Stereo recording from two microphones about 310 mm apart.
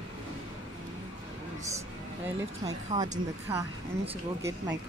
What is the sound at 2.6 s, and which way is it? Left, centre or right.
Speech, centre.